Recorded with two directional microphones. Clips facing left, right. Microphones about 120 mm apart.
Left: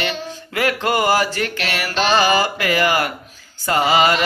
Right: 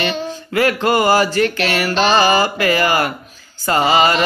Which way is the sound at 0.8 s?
30° right (ahead or behind).